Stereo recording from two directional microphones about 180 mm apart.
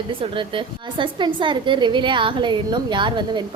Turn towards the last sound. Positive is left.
turn(degrees=-25)  # may be behind; listen again after turning